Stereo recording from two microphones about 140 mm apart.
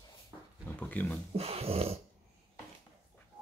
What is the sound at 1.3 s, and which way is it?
Speech, 45° right (ahead or behind).